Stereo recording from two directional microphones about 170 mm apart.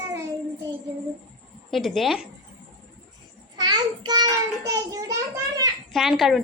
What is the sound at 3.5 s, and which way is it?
A child's voice, 25° right (ahead or behind).